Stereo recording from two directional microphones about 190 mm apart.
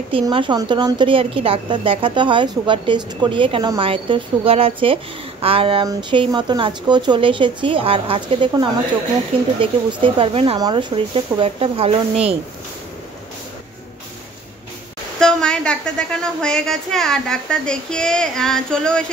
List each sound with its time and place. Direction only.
0.1 s a woman's voice: 25° right (ahead or behind)
15.1 s a woman's voice: 5° left (ahead or behind)